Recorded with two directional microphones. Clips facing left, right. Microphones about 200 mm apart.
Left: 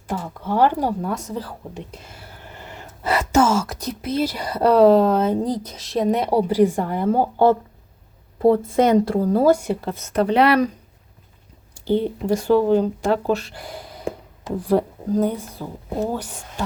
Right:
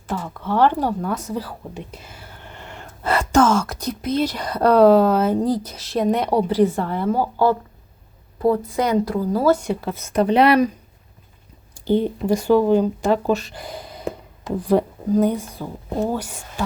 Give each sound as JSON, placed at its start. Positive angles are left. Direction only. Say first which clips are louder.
{"t": 0.1, "sound": "speech", "louder": "even", "side_deg": 40}
{"t": 0.4, "sound": "speech", "louder": "even", "side_deg": 10}
{"t": 1.0, "sound": "speech", "louder": "right 1 dB", "side_deg": -5}
{"t": 7.0, "sound": "a woman's voice", "louder": "left 2 dB", "side_deg": 55}
{"t": 8.6, "sound": "speech", "louder": "left 4 dB", "side_deg": 25}
{"t": 9.2, "sound": "a woman's voice", "louder": "left 3 dB", "side_deg": 55}
{"t": 9.5, "sound": "speech", "louder": "right 2 dB", "side_deg": 10}
{"t": 9.8, "sound": "speech", "louder": "right 1 dB", "side_deg": -10}
{"t": 11.7, "sound": "speech", "louder": "right 1 dB", "side_deg": -15}